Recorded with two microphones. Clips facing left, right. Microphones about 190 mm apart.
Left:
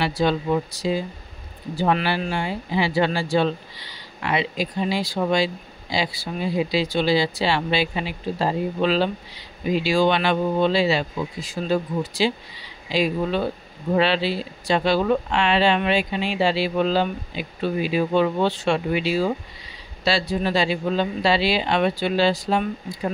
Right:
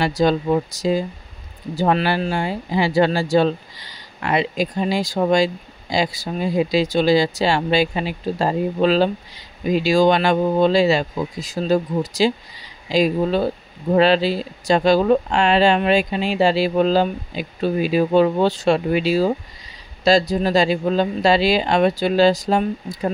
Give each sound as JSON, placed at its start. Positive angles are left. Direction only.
{"t": 0.0, "sound": "speech", "side_deg": -40}